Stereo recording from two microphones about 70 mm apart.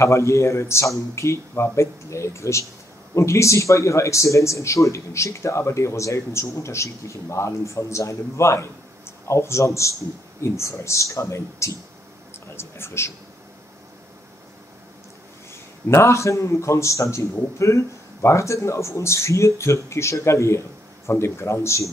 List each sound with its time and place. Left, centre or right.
0.0 s a man's voice: left
15.9 s a man's voice: left